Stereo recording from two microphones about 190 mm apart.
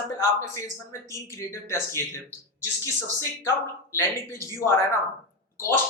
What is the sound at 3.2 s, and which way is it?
A man's voice, 15° left (ahead or behind).